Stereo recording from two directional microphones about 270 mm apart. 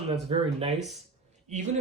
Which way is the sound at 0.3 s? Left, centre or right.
Centre.